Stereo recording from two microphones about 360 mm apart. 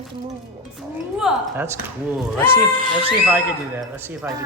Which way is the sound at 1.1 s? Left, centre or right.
Centre.